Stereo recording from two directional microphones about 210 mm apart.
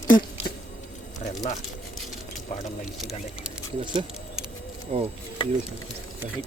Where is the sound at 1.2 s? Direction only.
35° left (ahead or behind).